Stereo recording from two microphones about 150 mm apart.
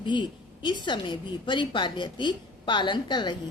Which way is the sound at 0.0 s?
30° left (ahead or behind).